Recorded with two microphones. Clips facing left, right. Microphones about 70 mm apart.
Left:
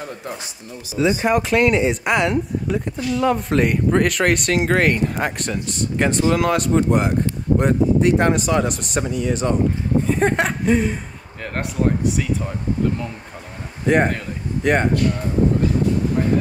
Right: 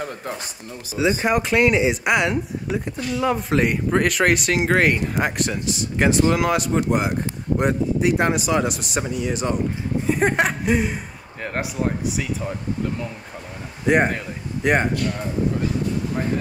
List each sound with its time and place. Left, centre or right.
1.2 s speech: centre
13.8 s speech: centre